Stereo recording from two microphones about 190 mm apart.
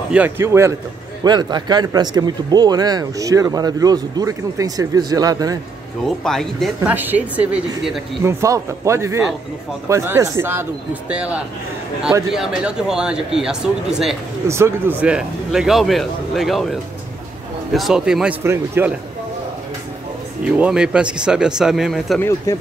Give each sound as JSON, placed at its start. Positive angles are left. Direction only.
{"t": 0.1, "sound": "speech", "side_deg": -10}
{"t": 6.0, "sound": "speech", "side_deg": 0}
{"t": 8.2, "sound": "speech", "side_deg": -15}
{"t": 14.5, "sound": "speech", "side_deg": -15}
{"t": 17.7, "sound": "speech", "side_deg": 0}
{"t": 20.4, "sound": "speech", "side_deg": -5}